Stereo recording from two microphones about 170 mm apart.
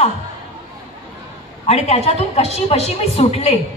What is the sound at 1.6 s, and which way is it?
A woman's voice, 40° left (ahead or behind).